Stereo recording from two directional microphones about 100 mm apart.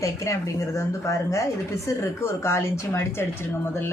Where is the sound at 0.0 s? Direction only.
30° left (ahead or behind).